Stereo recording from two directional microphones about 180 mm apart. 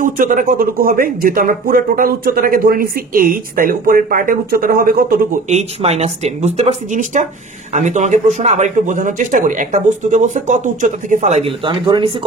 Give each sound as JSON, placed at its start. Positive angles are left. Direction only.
{"t": 0.0, "sound": "speech", "side_deg": -45}
{"t": 5.5, "sound": "speech", "side_deg": -35}
{"t": 11.6, "sound": "speech", "side_deg": -25}